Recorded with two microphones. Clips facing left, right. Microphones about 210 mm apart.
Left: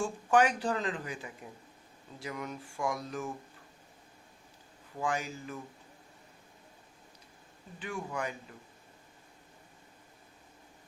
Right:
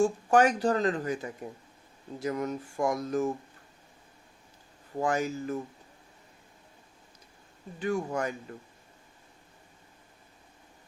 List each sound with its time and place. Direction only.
0.0 s speech: 40° right (ahead or behind)
4.9 s speech: 45° right (ahead or behind)
7.8 s speech: 45° right (ahead or behind)